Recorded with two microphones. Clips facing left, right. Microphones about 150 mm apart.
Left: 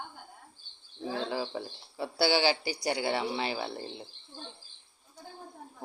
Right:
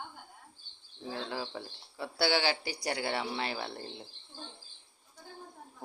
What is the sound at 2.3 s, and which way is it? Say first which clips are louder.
Speech: left 3 dB; 30° left (ahead or behind).